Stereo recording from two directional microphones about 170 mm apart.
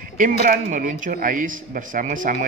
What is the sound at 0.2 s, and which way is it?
Speech, 50° right (ahead or behind).